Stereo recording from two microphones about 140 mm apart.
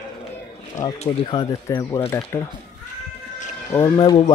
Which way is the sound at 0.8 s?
25° left (ahead or behind).